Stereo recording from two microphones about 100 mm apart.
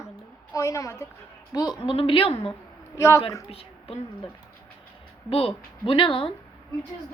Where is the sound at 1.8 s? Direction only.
60° left (ahead or behind).